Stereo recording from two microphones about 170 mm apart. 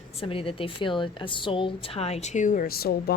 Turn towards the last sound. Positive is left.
turn(degrees=65)  # may be behind; listen again after turning